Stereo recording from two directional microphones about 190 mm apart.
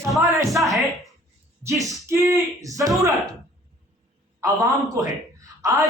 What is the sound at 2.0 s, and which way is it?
Speech, 15° right (ahead or behind).